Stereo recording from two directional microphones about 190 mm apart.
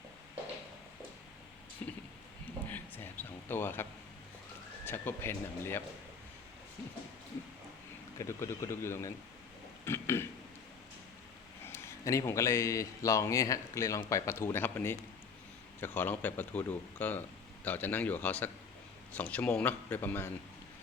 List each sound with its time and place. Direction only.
1.8 s speech: 10° left (ahead or behind)
2.6 s a sound: 10° left (ahead or behind)
4.9 s a man's voice: 10° left (ahead or behind)
8.2 s a man's voice: 15° left (ahead or behind)
9.8 s burping: 15° left (ahead or behind)
11.6 s a man's voice: 15° left (ahead or behind)